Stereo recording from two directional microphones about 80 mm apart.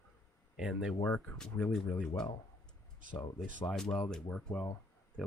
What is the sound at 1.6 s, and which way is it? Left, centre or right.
Speech, centre.